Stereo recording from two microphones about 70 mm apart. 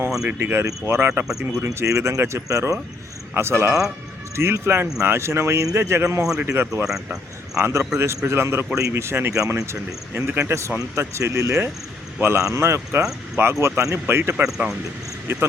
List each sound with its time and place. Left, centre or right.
0.3 s speech: right
0.6 s speech: right
0.9 s speech: right
1.2 s speech: centre
1.6 s speech: right
3.3 s speech: right
6.8 s speech: centre
7.6 s speech: right
9.3 s speech: right
10.2 s speech: right
14.4 s speech: centre
15.3 s speech: right